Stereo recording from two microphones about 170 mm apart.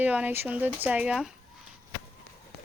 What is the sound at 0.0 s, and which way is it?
Speech, 10° right (ahead or behind).